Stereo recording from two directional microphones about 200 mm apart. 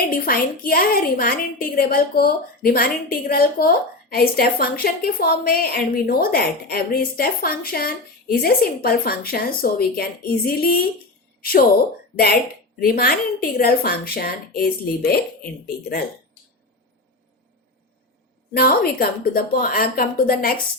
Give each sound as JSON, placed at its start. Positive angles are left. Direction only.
{"t": 0.1, "sound": "a woman's voice", "side_deg": 45}
{"t": 12.8, "sound": "a woman's voice", "side_deg": 50}
{"t": 18.5, "sound": "a woman's voice", "side_deg": 50}